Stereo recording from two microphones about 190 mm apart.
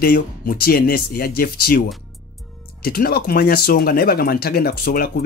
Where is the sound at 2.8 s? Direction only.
55° left (ahead or behind).